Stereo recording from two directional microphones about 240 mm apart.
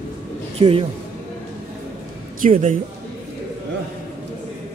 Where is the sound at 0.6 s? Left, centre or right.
Right.